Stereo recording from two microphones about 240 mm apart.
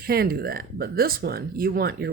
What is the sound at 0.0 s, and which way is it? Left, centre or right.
Speech, right.